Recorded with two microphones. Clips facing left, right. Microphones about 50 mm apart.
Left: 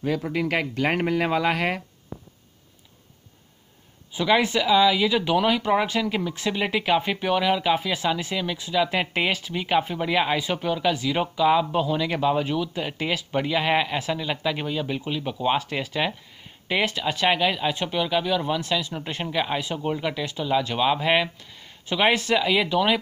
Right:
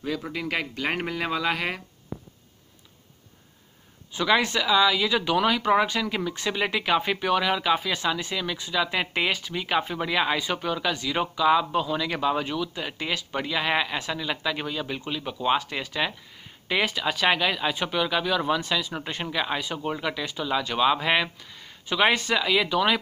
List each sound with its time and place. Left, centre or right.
0.3 s speech: left
4.1 s speech: centre
16.8 s speech: centre
17.7 s speech: centre
19.3 s speech: centre